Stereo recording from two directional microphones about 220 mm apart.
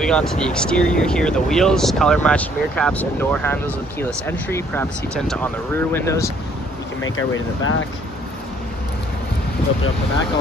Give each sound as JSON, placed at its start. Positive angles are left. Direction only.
{"t": 0.0, "sound": "speech", "side_deg": 5}
{"t": 7.0, "sound": "speech", "side_deg": 65}